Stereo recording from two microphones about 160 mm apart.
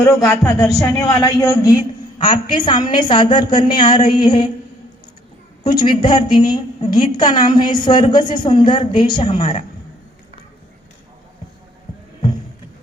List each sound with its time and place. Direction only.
0.0 s a man's voice: 20° left (ahead or behind)
5.6 s a man's voice: 30° left (ahead or behind)